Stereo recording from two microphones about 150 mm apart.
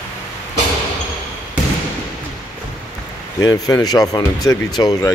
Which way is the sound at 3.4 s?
25° left (ahead or behind).